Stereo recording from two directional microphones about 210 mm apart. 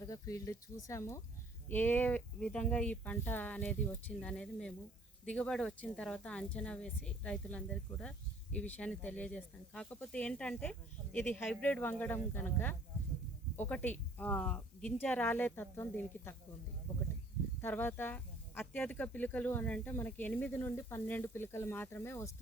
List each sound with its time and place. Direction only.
0.0 s speech: 15° left (ahead or behind)
17.6 s speech: 10° left (ahead or behind)